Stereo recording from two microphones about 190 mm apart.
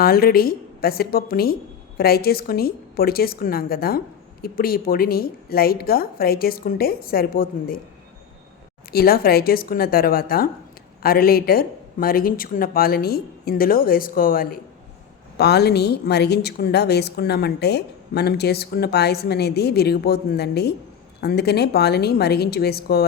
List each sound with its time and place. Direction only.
0.0 s speech: 50° left (ahead or behind)
8.9 s speech: 55° left (ahead or behind)
15.4 s a woman's voice: 60° left (ahead or behind)